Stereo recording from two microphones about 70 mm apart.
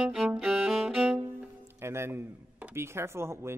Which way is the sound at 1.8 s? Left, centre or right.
Right.